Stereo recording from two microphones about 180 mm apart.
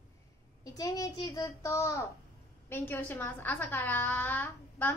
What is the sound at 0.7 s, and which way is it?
A woman's voice, 20° left (ahead or behind).